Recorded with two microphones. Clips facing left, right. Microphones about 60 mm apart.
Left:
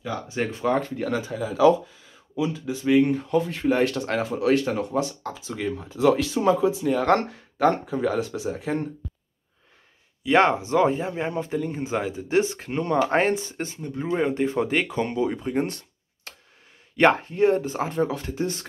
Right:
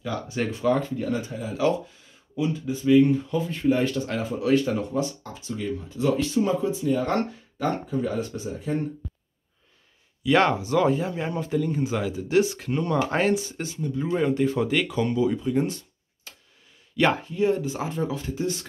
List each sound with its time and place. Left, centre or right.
0.0 s speech: centre
0.5 s speech: left
0.7 s speech: left
2.6 s speech: left
3.0 s speech: left
10.2 s speech: left
16.3 s a sound: left
16.9 s speech: left